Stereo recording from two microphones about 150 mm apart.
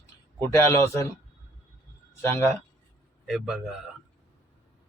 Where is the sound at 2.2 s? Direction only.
15° left (ahead or behind).